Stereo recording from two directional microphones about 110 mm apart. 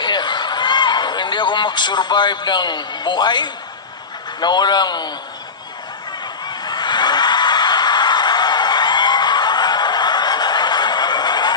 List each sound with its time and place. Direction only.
0.0 s a sound: 45° left (ahead or behind)
4.4 s a man's voice: 40° left (ahead or behind)
6.4 s snicker: 40° left (ahead or behind)